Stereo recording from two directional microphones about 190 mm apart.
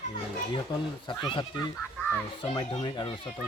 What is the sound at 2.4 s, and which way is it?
Speech, 25° left (ahead or behind).